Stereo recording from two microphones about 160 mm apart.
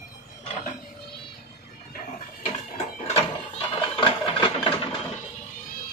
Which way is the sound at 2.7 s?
40° left (ahead or behind).